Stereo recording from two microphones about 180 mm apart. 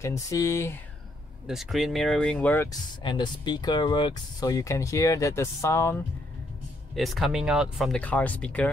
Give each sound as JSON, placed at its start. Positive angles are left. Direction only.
{"t": 0.0, "sound": "speech", "side_deg": 15}
{"t": 1.5, "sound": "speech", "side_deg": 0}
{"t": 3.0, "sound": "speech", "side_deg": 25}
{"t": 7.0, "sound": "speech", "side_deg": 0}